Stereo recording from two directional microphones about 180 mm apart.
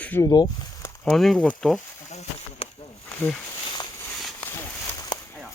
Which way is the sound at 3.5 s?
25° left (ahead or behind).